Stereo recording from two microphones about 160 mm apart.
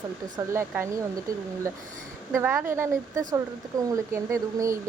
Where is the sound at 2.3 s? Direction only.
15° right (ahead or behind).